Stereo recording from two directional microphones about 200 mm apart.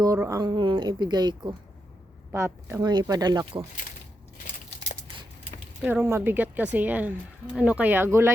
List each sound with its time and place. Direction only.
0.0 s a woman's voice: 15° right (ahead or behind)
5.8 s speech: 10° right (ahead or behind)